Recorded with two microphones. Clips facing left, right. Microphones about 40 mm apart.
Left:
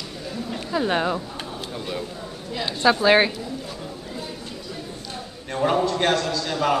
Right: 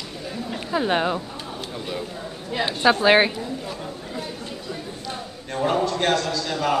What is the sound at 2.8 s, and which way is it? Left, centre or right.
Speech, centre.